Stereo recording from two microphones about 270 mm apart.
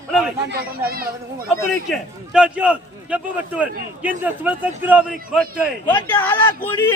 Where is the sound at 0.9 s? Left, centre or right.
Right.